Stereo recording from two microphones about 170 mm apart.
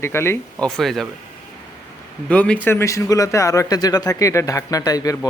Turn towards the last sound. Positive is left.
turn(degrees=20)  # may be behind; listen again after turning